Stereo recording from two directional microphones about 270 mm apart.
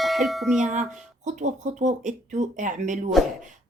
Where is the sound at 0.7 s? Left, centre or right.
Right.